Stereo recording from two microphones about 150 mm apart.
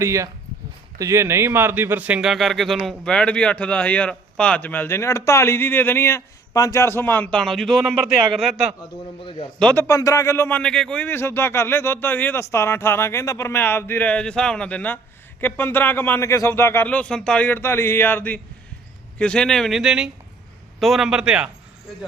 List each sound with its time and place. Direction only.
0.0 s a man's voice: 20° right (ahead or behind); by 8.5 s centre (ahead or behind)
9.6 s a man's voice: 5° left (ahead or behind)
9.8 s a man's voice: 20° left (ahead or behind); by 21.5 s 5° right (ahead or behind)